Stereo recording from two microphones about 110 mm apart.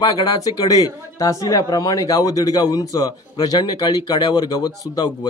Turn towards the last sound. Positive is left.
turn(degrees=35)  # may be behind; listen again after turning